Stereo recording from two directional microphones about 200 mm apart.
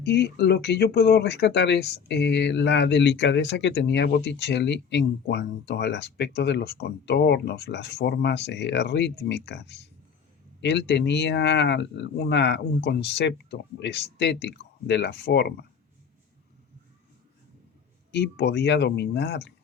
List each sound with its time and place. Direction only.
0.0 s speech: 55° left (ahead or behind)
18.1 s speech: 55° left (ahead or behind)